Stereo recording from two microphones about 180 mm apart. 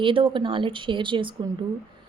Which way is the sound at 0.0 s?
30° right (ahead or behind).